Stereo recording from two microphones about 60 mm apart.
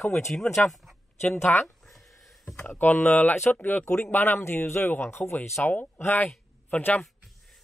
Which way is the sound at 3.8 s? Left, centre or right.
Left.